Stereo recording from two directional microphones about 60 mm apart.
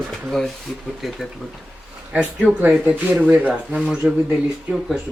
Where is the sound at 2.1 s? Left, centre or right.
Centre.